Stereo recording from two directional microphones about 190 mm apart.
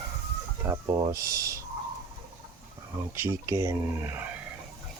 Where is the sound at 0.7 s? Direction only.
15° right (ahead or behind).